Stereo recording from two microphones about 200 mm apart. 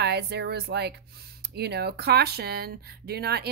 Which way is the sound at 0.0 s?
55° right (ahead or behind).